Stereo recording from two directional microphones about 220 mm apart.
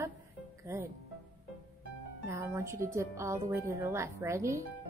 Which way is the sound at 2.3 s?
10° right (ahead or behind).